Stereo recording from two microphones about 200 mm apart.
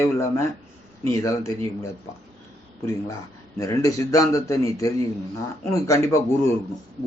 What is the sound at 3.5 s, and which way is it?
A man's voice, 15° left (ahead or behind).